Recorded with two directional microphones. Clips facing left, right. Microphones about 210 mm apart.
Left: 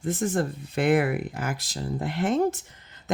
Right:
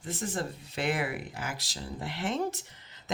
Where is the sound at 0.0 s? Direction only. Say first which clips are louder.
Left 8 dB; 50° left (ahead or behind).